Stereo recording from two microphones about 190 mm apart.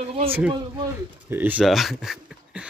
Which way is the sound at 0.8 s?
10° right (ahead or behind).